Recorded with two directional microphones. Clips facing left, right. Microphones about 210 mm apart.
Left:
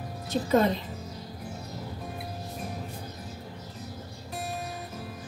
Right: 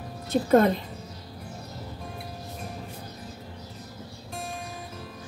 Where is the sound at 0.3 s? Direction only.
55° right (ahead or behind).